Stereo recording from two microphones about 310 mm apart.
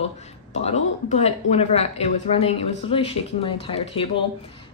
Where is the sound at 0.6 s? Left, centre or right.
Left.